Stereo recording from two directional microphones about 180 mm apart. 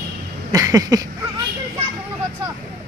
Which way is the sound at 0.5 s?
20° right (ahead or behind).